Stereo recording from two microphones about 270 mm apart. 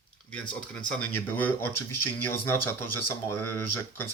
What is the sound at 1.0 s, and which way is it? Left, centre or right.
Speech, left.